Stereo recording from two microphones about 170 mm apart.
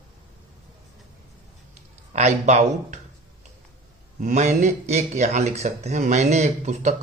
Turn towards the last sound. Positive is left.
turn(degrees=-40)  # may be behind; listen again after turning